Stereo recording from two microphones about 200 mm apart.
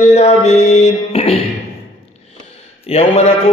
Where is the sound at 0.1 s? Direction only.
35° left (ahead or behind).